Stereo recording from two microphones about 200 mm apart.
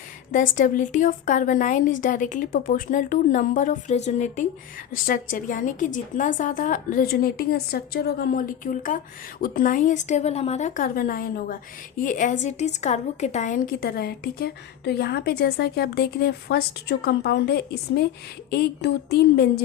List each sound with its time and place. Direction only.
0.5 s a woman's voice: 40° left (ahead or behind); by 19.0 s 55° left (ahead or behind)